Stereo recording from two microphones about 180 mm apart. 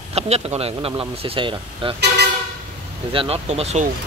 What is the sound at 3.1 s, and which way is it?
Speech, 35° right (ahead or behind).